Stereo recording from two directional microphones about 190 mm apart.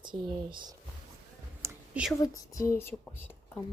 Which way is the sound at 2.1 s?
15° left (ahead or behind).